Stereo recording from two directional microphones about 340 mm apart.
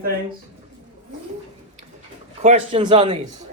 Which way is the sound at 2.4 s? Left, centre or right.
Centre.